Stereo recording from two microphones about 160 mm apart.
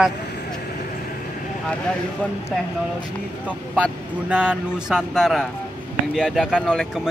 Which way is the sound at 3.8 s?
5° right (ahead or behind).